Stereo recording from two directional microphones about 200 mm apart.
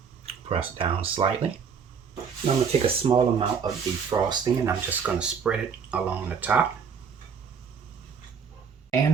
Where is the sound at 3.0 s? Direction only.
25° right (ahead or behind).